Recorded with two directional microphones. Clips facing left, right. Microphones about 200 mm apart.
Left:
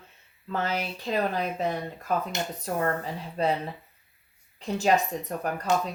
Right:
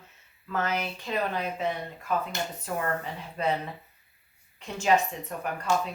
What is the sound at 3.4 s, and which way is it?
Speech, 35° left (ahead or behind).